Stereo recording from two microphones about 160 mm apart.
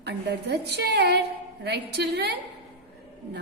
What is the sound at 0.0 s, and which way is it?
A woman's voice, 90° right.